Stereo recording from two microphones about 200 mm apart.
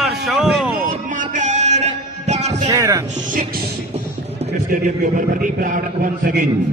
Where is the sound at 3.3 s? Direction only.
45° right (ahead or behind).